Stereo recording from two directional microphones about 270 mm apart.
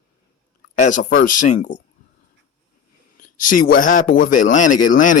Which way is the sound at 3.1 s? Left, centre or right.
Left.